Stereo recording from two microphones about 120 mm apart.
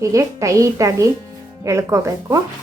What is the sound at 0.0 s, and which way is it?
A woman's voice, 25° right (ahead or behind).